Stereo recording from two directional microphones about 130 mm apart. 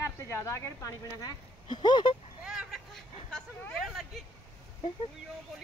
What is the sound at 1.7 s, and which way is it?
Speech, 35° left (ahead or behind).